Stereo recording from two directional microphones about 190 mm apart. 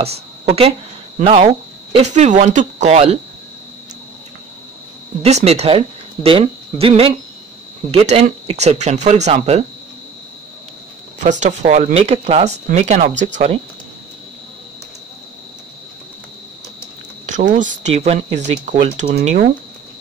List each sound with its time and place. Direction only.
0.0 s speech: 35° right (ahead or behind)
5.2 s speech: 35° right (ahead or behind)
11.4 s speech: 40° right (ahead or behind)
17.3 s speech: 40° right (ahead or behind)